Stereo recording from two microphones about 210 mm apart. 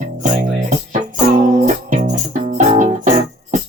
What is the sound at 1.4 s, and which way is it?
Music, 35° right (ahead or behind).